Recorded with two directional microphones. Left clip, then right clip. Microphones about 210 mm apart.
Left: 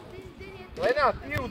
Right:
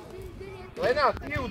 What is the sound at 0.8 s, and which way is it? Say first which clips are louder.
Speech: even; 50° right (ahead or behind).